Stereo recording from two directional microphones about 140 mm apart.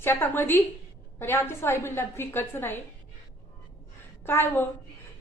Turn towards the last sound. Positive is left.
turn(degrees=15)  # may be behind; listen again after turning